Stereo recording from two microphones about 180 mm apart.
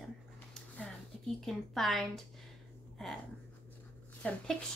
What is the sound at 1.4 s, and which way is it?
Speech, centre (ahead or behind).